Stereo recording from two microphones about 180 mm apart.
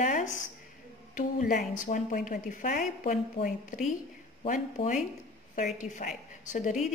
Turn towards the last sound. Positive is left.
turn(degrees=45)  # may be behind; listen again after turning